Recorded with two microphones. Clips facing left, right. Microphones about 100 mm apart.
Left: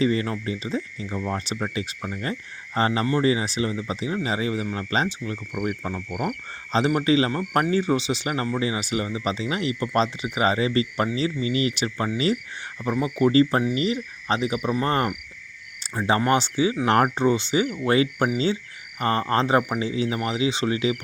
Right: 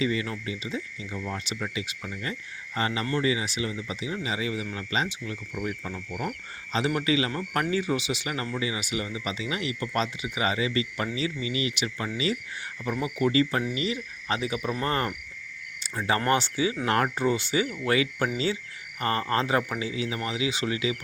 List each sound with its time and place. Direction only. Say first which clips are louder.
0.0 s speech: left 5 dB; 40° left (ahead or behind)
6.7 s speech: left 5 dB; 35° left (ahead or behind)